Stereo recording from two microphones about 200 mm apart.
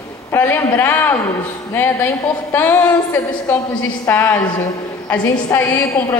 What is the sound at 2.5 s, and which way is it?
A man's voice, 10° left (ahead or behind).